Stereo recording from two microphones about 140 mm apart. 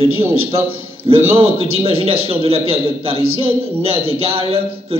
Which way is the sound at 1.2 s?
45° right (ahead or behind).